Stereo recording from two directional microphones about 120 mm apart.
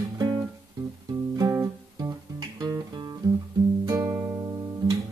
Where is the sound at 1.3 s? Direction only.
30° right (ahead or behind).